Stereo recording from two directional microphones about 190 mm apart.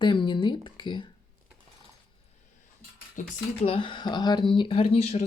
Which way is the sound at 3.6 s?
25° left (ahead or behind).